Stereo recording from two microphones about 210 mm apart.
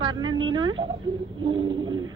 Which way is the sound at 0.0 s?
20° right (ahead or behind).